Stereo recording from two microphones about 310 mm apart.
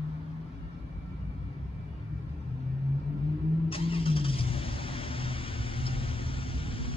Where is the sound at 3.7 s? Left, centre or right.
Centre.